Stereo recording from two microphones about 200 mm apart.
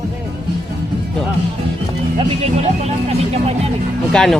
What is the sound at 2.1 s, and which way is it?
Speech, 30° right (ahead or behind).